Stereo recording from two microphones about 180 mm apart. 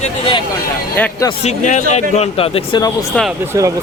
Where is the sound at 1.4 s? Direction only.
40° left (ahead or behind).